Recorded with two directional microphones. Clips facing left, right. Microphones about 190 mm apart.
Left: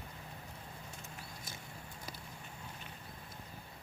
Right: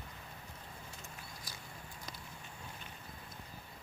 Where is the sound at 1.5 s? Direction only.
25° left (ahead or behind).